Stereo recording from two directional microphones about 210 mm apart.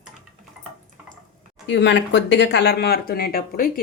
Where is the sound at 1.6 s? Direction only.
55° left (ahead or behind).